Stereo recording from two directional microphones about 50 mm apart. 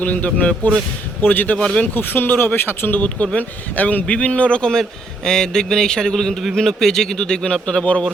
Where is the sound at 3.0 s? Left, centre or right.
Left.